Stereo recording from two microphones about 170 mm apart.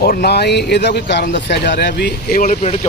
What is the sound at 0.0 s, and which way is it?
Speech, 60° left (ahead or behind).